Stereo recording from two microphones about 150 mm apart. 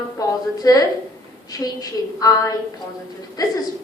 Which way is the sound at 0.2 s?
25° left (ahead or behind).